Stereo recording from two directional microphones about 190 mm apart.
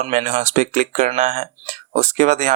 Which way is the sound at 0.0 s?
35° right (ahead or behind).